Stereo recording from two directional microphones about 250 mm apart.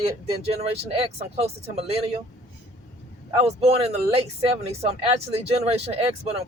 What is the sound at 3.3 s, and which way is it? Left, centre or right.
Speech, right.